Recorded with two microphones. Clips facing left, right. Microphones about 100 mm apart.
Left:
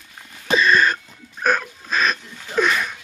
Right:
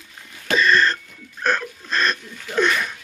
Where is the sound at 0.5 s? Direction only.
15° left (ahead or behind).